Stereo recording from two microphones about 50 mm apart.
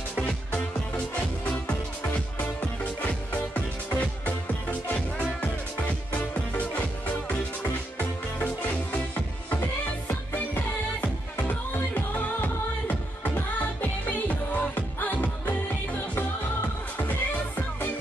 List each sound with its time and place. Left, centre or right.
0.5 s music: left
6.1 s music: left
17.1 s music: left